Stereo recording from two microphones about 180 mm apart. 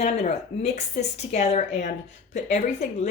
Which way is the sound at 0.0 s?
35° left (ahead or behind).